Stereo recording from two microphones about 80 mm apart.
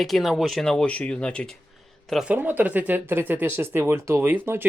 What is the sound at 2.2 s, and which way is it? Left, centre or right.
Speech, right.